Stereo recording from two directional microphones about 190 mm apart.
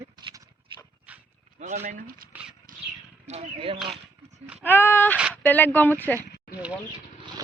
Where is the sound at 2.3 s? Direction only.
5° right (ahead or behind).